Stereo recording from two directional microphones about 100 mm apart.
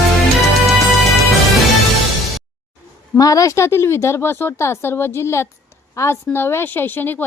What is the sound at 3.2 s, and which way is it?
A woman's voice, 35° left (ahead or behind).